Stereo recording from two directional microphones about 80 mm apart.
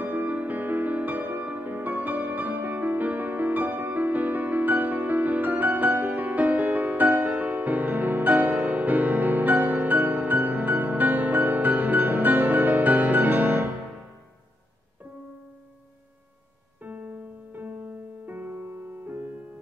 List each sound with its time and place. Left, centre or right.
0.0 s music: right
16.8 s music: right